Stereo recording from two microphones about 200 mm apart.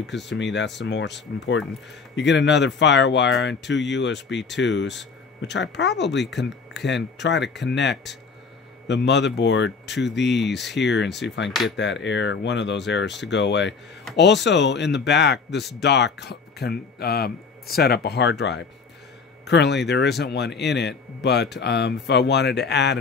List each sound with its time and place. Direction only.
0.0 s speech: 60° left (ahead or behind)